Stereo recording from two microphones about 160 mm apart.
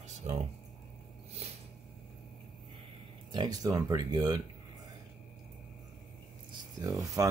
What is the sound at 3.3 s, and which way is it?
Speech, 25° right (ahead or behind).